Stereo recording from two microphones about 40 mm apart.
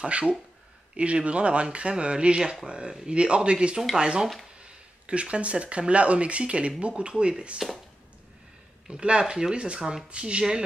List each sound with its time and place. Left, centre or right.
0.0 s speech: right
5.0 s speech: right
8.9 s speech: right
9.3 s speech: centre